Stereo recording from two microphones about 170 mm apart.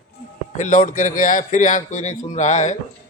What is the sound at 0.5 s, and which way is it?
A man's voice, 50° left (ahead or behind).